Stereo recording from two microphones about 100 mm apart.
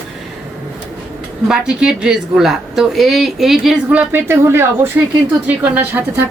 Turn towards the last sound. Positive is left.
turn(degrees=-20)  # may be behind; listen again after turning